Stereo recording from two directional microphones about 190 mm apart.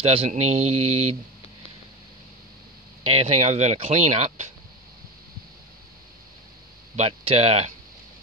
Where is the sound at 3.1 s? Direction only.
35° right (ahead or behind).